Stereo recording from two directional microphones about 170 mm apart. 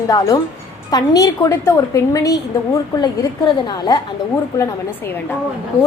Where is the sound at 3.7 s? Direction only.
25° left (ahead or behind).